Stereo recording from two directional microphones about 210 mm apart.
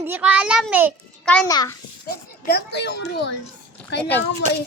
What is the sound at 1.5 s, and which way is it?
Speech, 15° left (ahead or behind).